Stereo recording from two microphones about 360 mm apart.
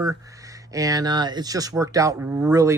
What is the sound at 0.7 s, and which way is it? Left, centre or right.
Speech, centre.